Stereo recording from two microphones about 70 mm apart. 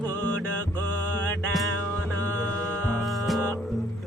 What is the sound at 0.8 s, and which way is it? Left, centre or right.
Mantra, left.